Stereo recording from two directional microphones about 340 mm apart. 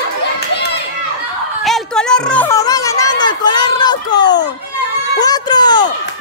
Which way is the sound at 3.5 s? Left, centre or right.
Centre.